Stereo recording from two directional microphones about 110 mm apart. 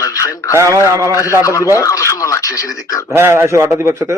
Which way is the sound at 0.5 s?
25° right (ahead or behind).